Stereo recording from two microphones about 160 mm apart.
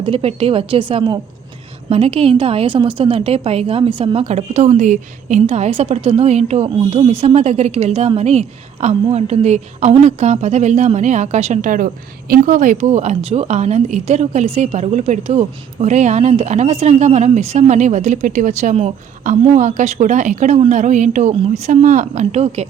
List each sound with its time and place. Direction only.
0.0 s a woman's voice: 35° right (ahead or behind)